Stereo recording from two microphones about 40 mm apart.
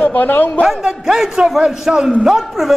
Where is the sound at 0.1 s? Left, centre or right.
Left.